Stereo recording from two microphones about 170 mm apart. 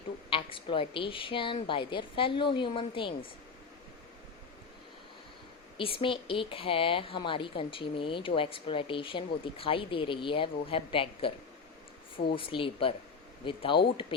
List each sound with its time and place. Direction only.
0.3 s a woman's voice: 30° left (ahead or behind)
5.7 s a woman's voice: 30° left (ahead or behind)
12.4 s a woman's voice: 30° left (ahead or behind)